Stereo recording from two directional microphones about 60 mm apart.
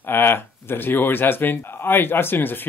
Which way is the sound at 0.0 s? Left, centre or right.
Left.